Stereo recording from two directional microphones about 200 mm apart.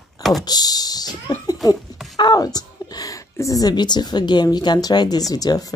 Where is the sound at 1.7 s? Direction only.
Centre (ahead or behind).